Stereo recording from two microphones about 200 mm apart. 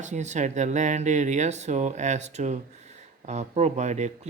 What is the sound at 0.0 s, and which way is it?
Speech, 35° right (ahead or behind).